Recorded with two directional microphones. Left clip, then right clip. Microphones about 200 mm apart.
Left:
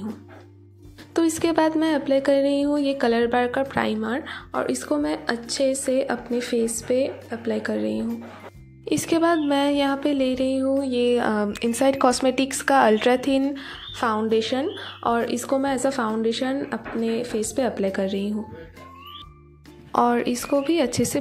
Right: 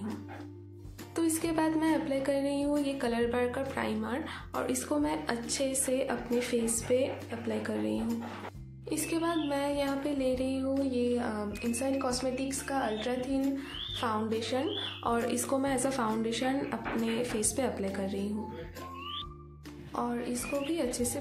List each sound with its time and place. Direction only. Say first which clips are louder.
1.1 s speech: left 10 dB; 35° left (ahead or behind)
19.9 s speech: left 14 dB; 40° left (ahead or behind)